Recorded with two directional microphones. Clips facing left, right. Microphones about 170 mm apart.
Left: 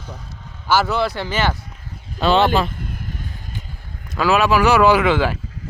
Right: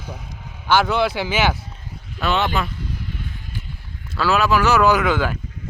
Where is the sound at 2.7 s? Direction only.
50° left (ahead or behind).